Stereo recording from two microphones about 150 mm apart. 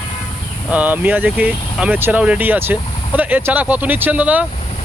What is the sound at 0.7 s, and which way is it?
Speech, 10° right (ahead or behind).